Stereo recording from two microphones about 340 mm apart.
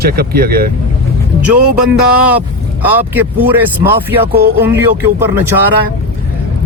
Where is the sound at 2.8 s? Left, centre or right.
Centre.